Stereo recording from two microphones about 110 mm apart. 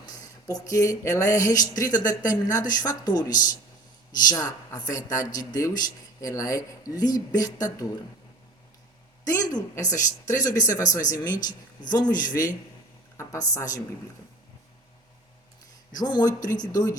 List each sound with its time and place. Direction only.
0.0 s speech: 35° left (ahead or behind)
9.2 s a woman's voice: 30° left (ahead or behind)
13.5 s a woman's voice: 30° left (ahead or behind)
16.0 s speech: 40° left (ahead or behind)